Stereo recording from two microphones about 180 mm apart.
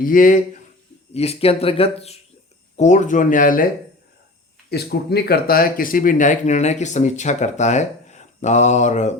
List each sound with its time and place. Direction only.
0.0 s speech: 50° left (ahead or behind)
1.1 s speech: 35° left (ahead or behind); by 3.7 s 50° left (ahead or behind)
4.7 s speech: 60° left (ahead or behind); by 9.1 s 40° left (ahead or behind)